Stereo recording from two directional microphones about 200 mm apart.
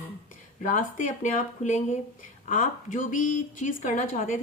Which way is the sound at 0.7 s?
40° left (ahead or behind).